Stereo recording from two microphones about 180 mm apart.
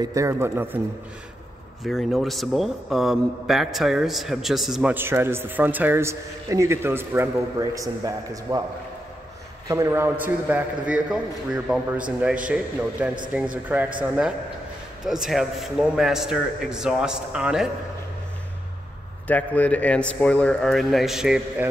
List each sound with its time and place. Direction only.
0.0 s a man's voice: 15° right (ahead or behind)
1.8 s a man's voice: centre (ahead or behind); by 8.6 s 20° right (ahead or behind)
9.7 s a man's voice: 15° right (ahead or behind)
13.0 s a man's voice: 10° right (ahead or behind)
19.2 s a man's voice: 10° left (ahead or behind)